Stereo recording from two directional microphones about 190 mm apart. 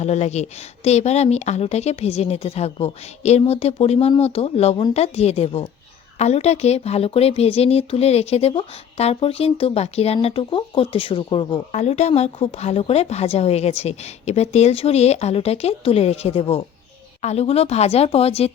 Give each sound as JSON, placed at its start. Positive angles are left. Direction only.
{"t": 0.0, "sound": "speech", "side_deg": 35}